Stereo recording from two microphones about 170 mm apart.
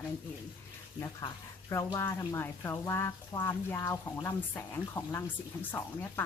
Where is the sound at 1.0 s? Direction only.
15° left (ahead or behind).